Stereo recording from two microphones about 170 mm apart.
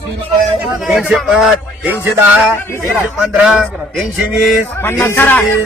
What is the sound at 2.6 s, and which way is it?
Music, 15° left (ahead or behind).